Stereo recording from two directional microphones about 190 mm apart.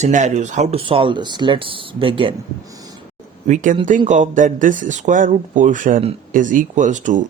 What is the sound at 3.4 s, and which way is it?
Speech, 40° right (ahead or behind).